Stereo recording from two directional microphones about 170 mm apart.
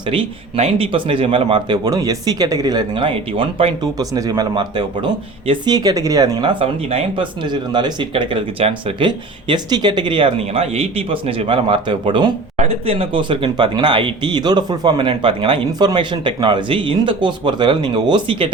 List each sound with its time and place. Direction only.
0.1 s speech: 35° right (ahead or behind)